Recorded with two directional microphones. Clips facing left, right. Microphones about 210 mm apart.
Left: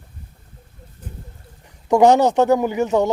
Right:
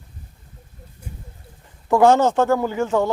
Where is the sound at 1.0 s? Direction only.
10° right (ahead or behind).